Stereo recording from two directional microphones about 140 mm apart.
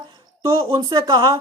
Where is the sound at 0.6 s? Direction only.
35° right (ahead or behind).